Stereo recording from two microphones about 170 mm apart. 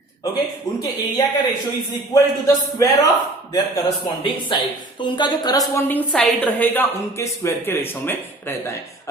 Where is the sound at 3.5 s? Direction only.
25° left (ahead or behind).